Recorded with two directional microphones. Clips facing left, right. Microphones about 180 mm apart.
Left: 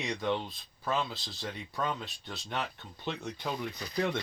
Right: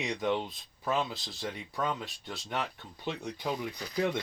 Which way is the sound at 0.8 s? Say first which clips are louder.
Right 1 dB; 20° right (ahead or behind).